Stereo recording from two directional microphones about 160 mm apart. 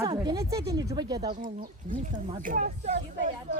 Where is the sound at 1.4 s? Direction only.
55° right (ahead or behind).